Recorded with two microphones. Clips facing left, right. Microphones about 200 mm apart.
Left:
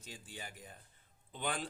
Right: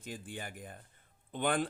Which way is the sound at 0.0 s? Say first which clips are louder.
Right 7 dB; 55° right (ahead or behind).